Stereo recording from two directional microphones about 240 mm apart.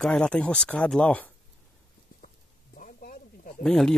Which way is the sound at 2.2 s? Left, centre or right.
Left.